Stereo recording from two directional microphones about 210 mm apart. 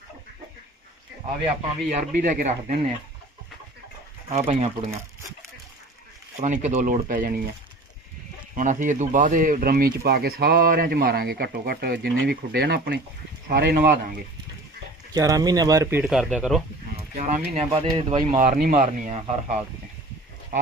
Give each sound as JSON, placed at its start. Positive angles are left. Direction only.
{"t": 1.9, "sound": "speech", "side_deg": -40}
{"t": 4.3, "sound": "speech", "side_deg": -30}
{"t": 6.4, "sound": "speech", "side_deg": -35}
{"t": 8.5, "sound": "speech", "side_deg": -40}
{"t": 15.1, "sound": "speech", "side_deg": -15}
{"t": 17.2, "sound": "speech", "side_deg": -35}